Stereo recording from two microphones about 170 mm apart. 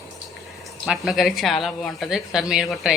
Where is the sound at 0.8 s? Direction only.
Centre (ahead or behind).